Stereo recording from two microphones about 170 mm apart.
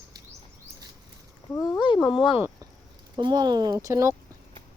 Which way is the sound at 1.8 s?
30° left (ahead or behind).